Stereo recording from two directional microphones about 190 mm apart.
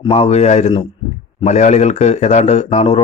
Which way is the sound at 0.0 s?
30° left (ahead or behind).